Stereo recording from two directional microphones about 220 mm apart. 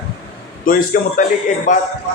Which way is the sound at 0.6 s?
40° left (ahead or behind).